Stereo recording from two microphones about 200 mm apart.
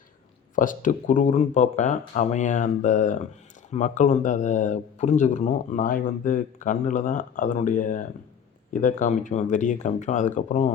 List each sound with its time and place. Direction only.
0.5 s speech: 40° left (ahead or behind)